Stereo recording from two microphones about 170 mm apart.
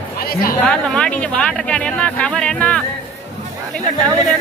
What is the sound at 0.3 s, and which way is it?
Speech, 60° left (ahead or behind).